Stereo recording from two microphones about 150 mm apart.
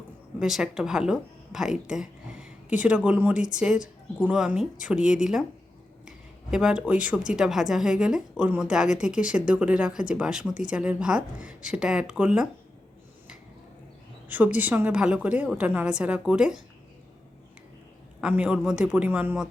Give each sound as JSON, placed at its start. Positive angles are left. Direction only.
{"t": 0.3, "sound": "speech", "side_deg": -5}
{"t": 14.3, "sound": "a woman's voice", "side_deg": -10}
{"t": 18.2, "sound": "a woman's voice", "side_deg": -5}